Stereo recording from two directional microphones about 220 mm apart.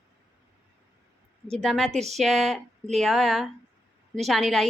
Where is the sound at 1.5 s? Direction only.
Centre (ahead or behind).